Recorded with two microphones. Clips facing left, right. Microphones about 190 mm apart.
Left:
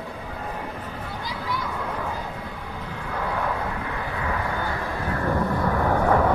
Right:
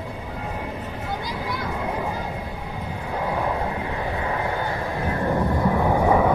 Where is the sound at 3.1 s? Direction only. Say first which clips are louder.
Right 2 dB; 20° right (ahead or behind).